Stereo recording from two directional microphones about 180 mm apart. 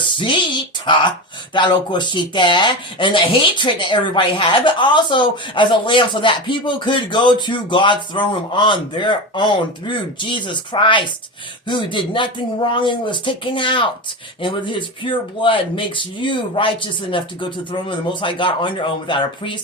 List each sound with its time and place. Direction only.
0.2 s speech: 25° left (ahead or behind)